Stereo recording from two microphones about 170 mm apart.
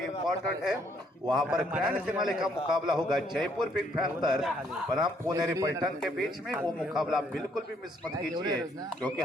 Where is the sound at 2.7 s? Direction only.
25° right (ahead or behind).